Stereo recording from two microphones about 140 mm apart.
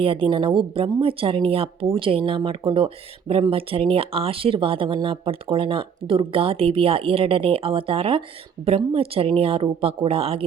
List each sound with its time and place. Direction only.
0.0 s speech: 40° right (ahead or behind)